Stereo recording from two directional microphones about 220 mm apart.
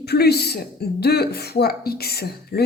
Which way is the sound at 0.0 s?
45° left (ahead or behind).